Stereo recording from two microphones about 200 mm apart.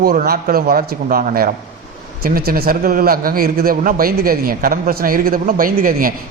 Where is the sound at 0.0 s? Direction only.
45° right (ahead or behind).